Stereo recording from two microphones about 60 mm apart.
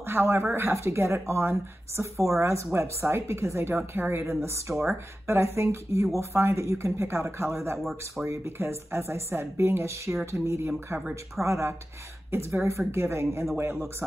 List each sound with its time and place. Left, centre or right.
0.0 s speech: right